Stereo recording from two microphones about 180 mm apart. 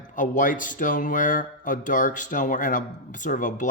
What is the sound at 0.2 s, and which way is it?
Speech, 45° left (ahead or behind).